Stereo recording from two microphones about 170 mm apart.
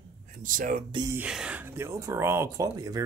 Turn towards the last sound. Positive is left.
turn(degrees=-20)  # may be behind; listen again after turning